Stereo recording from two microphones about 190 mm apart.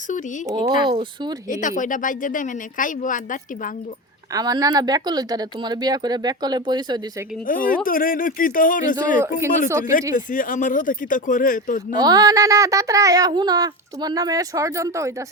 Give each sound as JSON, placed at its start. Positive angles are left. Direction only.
{"t": 0.1, "sound": "speech", "side_deg": 40}
{"t": 0.4, "sound": "speech", "side_deg": -20}
{"t": 1.5, "sound": "speech", "side_deg": 40}
{"t": 4.3, "sound": "speech", "side_deg": -20}
{"t": 7.4, "sound": "speech", "side_deg": 45}
{"t": 9.6, "sound": "speech", "side_deg": -15}
{"t": 10.2, "sound": "speech", "side_deg": 45}
{"t": 11.9, "sound": "speech", "side_deg": -20}